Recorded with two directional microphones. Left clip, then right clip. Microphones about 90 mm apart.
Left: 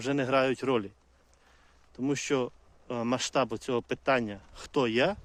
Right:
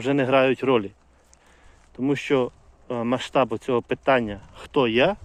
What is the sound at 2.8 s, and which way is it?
Speech, 50° left (ahead or behind).